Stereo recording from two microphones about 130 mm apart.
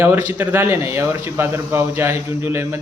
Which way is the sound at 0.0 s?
15° right (ahead or behind).